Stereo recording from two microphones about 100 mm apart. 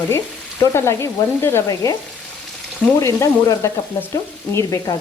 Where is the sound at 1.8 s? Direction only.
35° left (ahead or behind).